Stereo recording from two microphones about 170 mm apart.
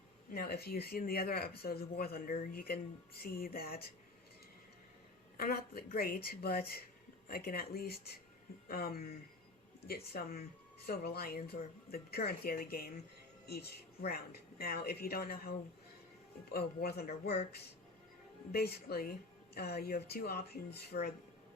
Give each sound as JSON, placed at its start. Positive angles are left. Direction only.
{"t": 0.3, "sound": "a woman's voice", "side_deg": 60}
{"t": 5.4, "sound": "a woman's voice", "side_deg": 60}
{"t": 18.5, "sound": "a woman's voice", "side_deg": 70}